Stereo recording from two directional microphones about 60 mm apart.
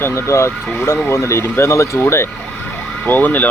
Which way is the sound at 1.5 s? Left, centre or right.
Left.